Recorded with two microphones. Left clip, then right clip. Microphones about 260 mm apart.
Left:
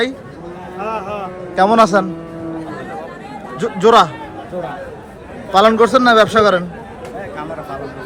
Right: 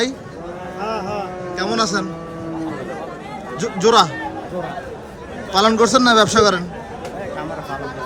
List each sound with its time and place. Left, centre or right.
0.9 s a sound: left
1.5 s a man's voice: centre
3.6 s a man's voice: centre
5.5 s a man's voice: centre